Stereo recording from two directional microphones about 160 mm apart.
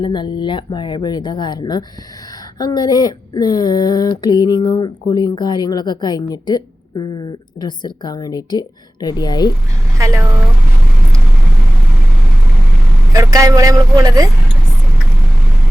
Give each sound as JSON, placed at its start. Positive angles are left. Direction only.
{"t": 0.0, "sound": "speech", "side_deg": 30}
{"t": 10.0, "sound": "speech", "side_deg": -20}
{"t": 13.1, "sound": "speech", "side_deg": -20}